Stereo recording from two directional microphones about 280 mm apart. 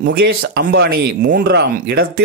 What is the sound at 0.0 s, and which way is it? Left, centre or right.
Speech, right.